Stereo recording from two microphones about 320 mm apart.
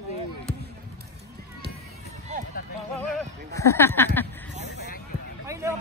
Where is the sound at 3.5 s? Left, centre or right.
Centre.